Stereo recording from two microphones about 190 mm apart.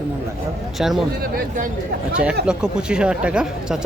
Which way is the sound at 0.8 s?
5° right (ahead or behind).